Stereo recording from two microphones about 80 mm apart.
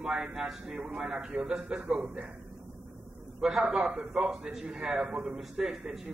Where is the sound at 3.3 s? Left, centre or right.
Centre.